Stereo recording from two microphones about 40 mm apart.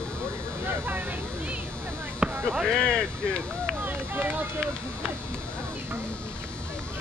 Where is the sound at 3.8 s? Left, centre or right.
Right.